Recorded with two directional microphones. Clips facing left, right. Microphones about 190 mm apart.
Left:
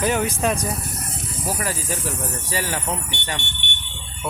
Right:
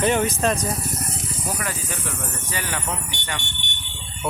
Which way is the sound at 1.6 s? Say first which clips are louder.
Left 3 dB; 35° left (ahead or behind).